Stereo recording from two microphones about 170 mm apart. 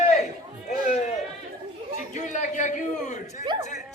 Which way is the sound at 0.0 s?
45° left (ahead or behind).